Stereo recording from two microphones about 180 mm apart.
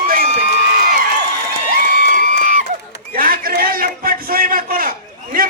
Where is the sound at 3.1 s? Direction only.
55° right (ahead or behind).